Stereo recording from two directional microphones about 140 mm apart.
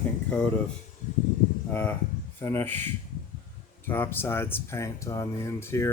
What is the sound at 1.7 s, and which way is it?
Speech, 15° left (ahead or behind).